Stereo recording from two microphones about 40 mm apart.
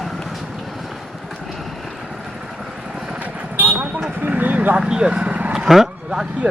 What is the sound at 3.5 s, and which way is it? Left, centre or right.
Vehicle, right.